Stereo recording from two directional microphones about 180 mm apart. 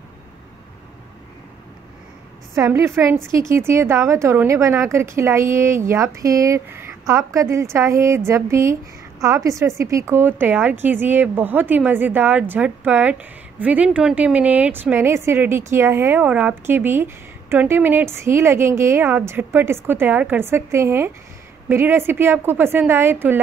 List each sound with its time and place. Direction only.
2.5 s a woman's voice: 15° right (ahead or behind)